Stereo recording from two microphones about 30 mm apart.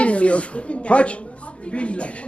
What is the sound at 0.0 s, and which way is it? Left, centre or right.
A man's voice, left.